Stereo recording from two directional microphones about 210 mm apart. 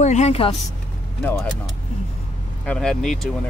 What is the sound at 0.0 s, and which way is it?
Speech, 35° left (ahead or behind).